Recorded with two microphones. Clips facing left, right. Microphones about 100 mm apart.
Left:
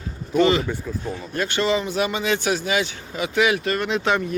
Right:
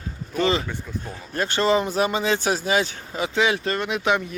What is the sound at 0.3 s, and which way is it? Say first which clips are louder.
Speech: left 4 dB; 30° right (ahead or behind).